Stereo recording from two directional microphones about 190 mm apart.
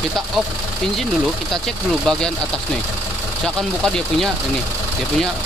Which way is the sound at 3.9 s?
Centre (ahead or behind).